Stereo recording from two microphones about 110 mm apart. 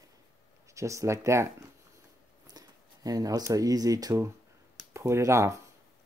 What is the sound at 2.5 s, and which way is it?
Speech, 35° right (ahead or behind).